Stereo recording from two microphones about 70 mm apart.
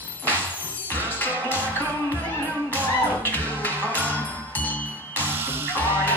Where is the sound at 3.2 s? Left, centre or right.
Left.